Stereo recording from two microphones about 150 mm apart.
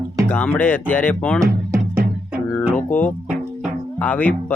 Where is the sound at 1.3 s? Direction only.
20° right (ahead or behind).